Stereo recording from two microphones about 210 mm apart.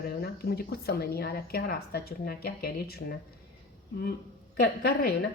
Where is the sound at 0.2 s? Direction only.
50° left (ahead or behind).